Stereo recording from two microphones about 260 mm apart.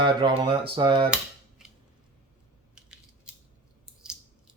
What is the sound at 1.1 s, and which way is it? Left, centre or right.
Cap gun, centre.